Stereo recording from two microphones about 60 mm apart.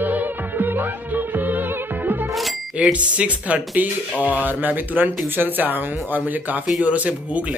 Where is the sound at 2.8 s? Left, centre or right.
Centre.